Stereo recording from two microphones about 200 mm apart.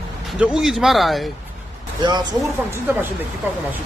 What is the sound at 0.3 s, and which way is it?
Speech, 5° right (ahead or behind).